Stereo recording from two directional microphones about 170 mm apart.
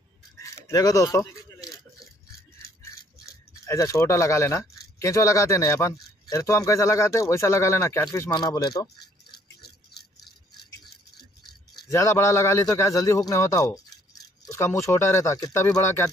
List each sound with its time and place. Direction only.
0.4 s a sound: 20° left (ahead or behind)
3.6 s a man's voice: 20° left (ahead or behind)
11.9 s a man's voice: 15° left (ahead or behind)